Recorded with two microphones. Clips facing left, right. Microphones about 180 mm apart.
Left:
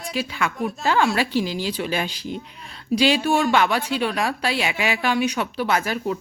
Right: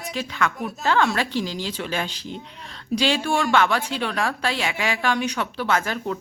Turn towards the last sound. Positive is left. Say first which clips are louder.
# left 1 dB
turn(degrees=10)  # may be behind; listen again after turning